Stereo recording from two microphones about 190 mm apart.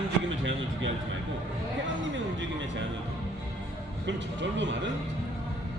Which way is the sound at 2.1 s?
75° right (ahead or behind).